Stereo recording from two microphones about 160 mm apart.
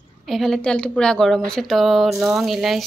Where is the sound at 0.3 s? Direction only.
Centre (ahead or behind).